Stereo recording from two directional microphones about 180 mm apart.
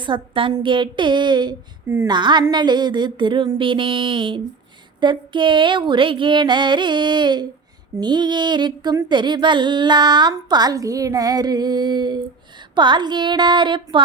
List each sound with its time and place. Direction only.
0.0 s a woman's voice: 25° right (ahead or behind)